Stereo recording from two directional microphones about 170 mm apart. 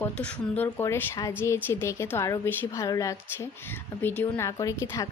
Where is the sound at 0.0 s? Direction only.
10° left (ahead or behind).